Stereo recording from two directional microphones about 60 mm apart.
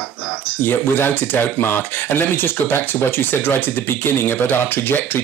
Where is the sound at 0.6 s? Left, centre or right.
Left.